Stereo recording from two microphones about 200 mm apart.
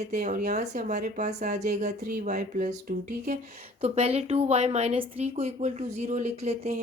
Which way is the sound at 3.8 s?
30° right (ahead or behind).